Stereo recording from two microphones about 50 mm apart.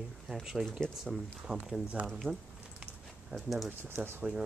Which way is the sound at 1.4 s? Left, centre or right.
Centre.